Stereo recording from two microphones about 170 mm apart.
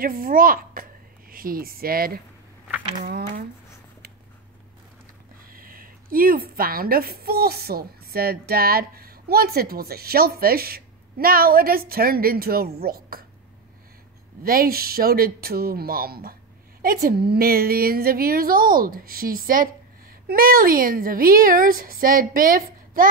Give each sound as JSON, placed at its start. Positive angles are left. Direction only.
{"t": 0.0, "sound": "a woman's voice", "side_deg": -55}
{"t": 5.4, "sound": "a woman's voice", "side_deg": -55}
{"t": 14.4, "sound": "a woman's voice", "side_deg": -60}